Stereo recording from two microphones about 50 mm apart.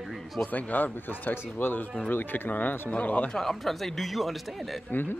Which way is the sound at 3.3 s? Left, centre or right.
Centre.